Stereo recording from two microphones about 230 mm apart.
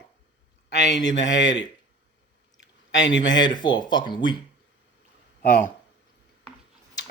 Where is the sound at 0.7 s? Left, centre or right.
Left.